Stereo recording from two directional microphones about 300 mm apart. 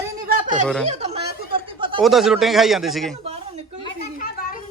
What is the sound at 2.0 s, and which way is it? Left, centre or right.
A man's voice, centre.